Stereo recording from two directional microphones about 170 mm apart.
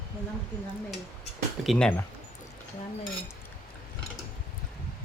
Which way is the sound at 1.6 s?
Centre (ahead or behind).